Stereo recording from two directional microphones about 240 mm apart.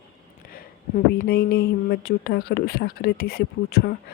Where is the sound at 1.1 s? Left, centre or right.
Left.